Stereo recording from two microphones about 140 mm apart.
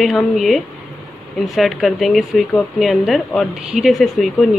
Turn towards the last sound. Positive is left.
turn(degrees=0)  # may be behind; listen again after turning